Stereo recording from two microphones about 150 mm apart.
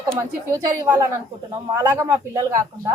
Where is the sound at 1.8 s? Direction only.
20° right (ahead or behind).